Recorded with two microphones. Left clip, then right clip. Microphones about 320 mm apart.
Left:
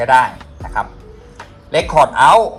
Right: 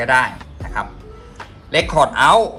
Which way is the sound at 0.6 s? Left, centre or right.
Left.